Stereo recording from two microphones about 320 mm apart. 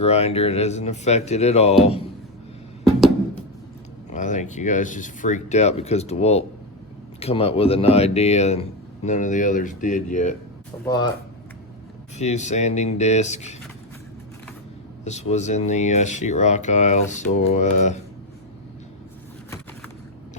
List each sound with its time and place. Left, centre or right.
0.0 s speech: centre
4.1 s speech: left
12.1 s speech: left
15.0 s speech: left